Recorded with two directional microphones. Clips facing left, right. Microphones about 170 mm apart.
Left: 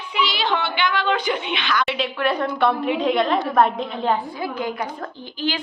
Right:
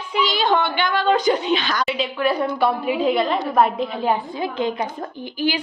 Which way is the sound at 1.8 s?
Centre (ahead or behind).